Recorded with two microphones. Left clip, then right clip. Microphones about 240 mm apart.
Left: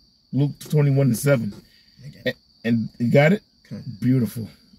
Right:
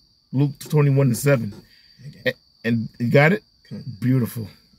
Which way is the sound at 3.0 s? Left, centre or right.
Right.